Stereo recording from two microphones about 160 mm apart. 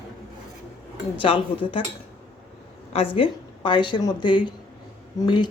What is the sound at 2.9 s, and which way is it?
A woman's voice, 35° left (ahead or behind).